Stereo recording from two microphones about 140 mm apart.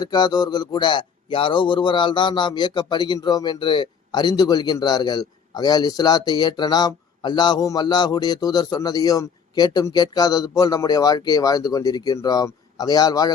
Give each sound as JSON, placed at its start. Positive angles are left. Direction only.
{"t": 0.0, "sound": "a man's voice", "side_deg": 30}